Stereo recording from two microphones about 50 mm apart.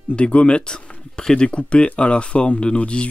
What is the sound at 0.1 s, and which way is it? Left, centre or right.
Speech, left.